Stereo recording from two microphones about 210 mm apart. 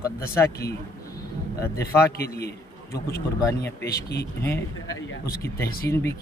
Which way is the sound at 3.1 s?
10° left (ahead or behind).